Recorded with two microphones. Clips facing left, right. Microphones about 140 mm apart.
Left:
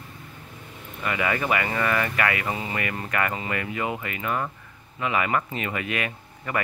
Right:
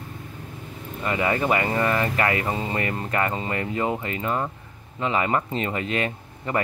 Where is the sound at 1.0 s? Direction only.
30° right (ahead or behind).